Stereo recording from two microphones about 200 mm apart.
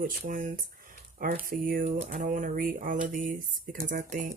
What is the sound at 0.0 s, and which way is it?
Speech, 45° right (ahead or behind).